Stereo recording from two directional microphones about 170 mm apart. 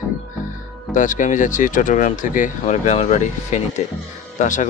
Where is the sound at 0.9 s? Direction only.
50° left (ahead or behind).